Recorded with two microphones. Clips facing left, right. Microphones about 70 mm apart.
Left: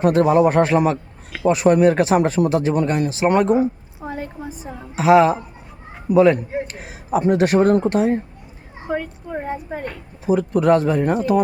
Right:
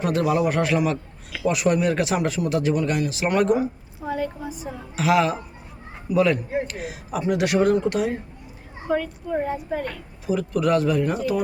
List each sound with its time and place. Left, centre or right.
0.0 s a man's voice: left
3.6 s a sound: left
4.9 s a man's voice: left
8.9 s a man's voice: left